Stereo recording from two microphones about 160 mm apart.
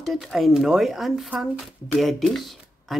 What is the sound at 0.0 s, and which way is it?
Speech, centre (ahead or behind).